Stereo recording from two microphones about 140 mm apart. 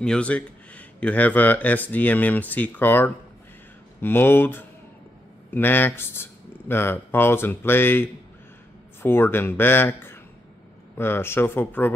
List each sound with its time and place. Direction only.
0.0 s speech: 5° left (ahead or behind)